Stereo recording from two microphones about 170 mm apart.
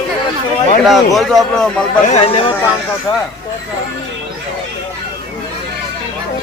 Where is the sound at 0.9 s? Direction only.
Centre (ahead or behind).